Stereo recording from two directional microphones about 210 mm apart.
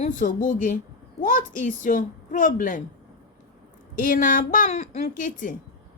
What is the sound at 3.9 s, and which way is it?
Speech, 40° left (ahead or behind).